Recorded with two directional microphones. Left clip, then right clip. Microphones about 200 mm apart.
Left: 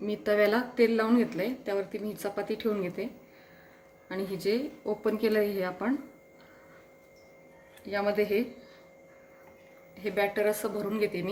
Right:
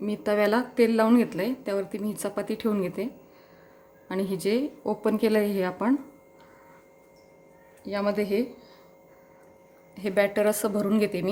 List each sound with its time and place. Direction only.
0.0 s speech: 35° right (ahead or behind)
4.1 s speech: 40° right (ahead or behind)
7.9 s a woman's voice: 40° right (ahead or behind)
9.9 s a woman's voice: 50° right (ahead or behind)